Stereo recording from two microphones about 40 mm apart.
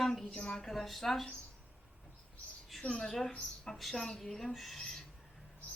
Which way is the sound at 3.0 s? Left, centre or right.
Centre.